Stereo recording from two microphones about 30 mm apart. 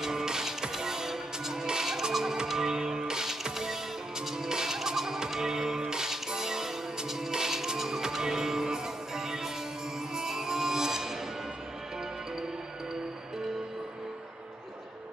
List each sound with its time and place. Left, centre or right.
0.0 s music: centre